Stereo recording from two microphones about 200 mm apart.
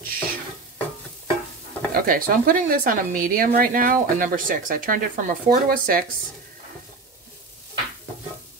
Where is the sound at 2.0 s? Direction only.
45° right (ahead or behind).